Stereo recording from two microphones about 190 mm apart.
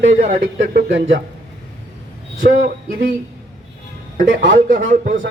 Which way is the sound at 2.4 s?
45° right (ahead or behind).